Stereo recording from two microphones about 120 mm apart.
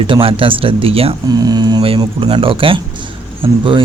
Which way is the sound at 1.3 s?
35° right (ahead or behind).